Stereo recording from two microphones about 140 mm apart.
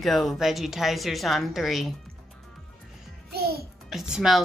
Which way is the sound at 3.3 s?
90° right.